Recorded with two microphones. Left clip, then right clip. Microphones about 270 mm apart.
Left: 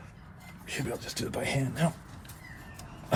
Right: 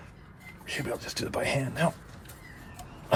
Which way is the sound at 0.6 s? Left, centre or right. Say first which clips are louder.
Right 2 dB; right.